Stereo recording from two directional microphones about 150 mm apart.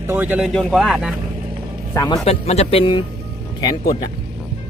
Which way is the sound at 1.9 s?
25° left (ahead or behind).